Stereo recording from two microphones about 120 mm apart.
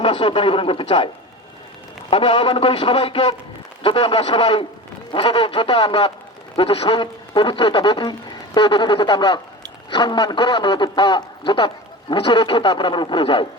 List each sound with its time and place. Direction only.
0.0 s a man's voice: 45° left (ahead or behind)